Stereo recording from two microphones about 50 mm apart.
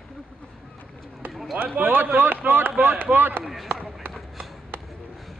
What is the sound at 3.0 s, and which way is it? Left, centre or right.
Speech, right.